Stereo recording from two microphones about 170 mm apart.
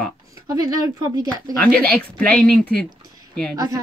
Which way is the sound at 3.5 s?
20° right (ahead or behind).